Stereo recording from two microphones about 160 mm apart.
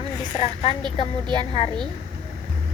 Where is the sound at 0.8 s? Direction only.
30° right (ahead or behind).